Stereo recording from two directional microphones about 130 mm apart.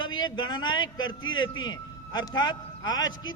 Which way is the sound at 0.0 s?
35° left (ahead or behind).